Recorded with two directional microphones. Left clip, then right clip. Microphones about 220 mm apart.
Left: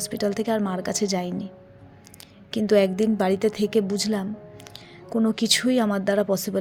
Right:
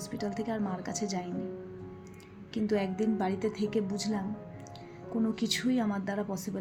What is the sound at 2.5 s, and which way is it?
A woman's voice, 50° left (ahead or behind).